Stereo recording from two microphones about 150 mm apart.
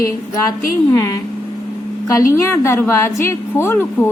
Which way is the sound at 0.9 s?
20° left (ahead or behind).